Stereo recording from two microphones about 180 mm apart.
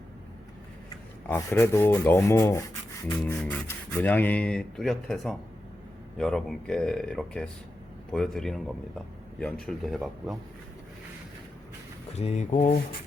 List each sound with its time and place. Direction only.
1.3 s speech: 15° left (ahead or behind)
12.1 s speech: 40° left (ahead or behind)